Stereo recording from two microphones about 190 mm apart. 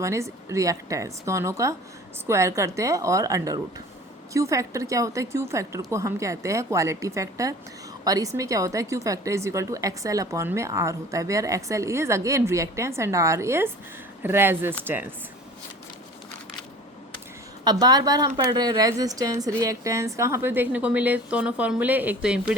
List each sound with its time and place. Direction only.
0.0 s a woman's voice: 15° right (ahead or behind)
17.6 s a woman's voice: 20° right (ahead or behind); by 22.5 s 5° right (ahead or behind)